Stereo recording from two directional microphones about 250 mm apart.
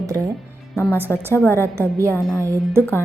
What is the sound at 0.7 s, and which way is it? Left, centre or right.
A woman's voice, centre.